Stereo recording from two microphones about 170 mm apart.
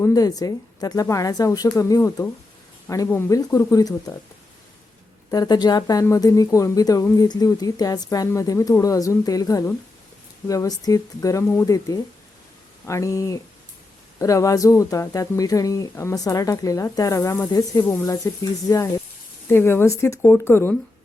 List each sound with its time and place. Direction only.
0.0 s speech: 20° left (ahead or behind)
5.3 s speech: 25° left (ahead or behind)